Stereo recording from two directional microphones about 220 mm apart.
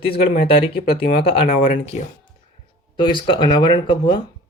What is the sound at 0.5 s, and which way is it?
Speech, 45° left (ahead or behind).